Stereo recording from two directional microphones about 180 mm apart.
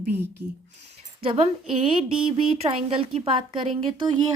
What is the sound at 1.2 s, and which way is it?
Speech, 30° right (ahead or behind).